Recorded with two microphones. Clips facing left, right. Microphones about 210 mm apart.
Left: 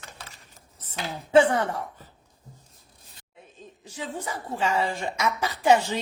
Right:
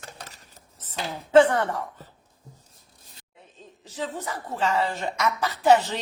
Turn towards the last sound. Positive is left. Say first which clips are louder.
# right 1 dB
turn(degrees=10)  # may be behind; listen again after turning